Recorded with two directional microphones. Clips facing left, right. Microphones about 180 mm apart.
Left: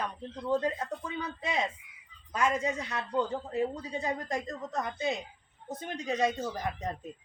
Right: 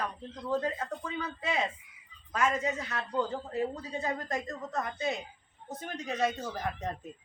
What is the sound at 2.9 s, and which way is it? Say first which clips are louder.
A man's voice: left 1 dB; 20° left (ahead or behind).